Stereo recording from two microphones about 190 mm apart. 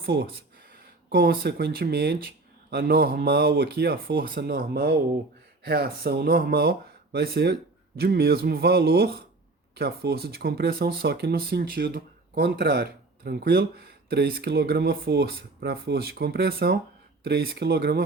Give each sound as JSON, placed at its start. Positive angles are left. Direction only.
{"t": 0.0, "sound": "speech", "side_deg": -60}